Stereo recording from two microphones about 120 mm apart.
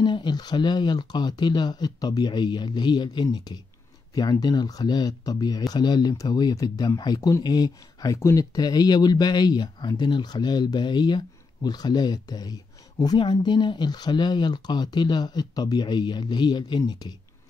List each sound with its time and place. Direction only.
0.0 s speech: 40° left (ahead or behind)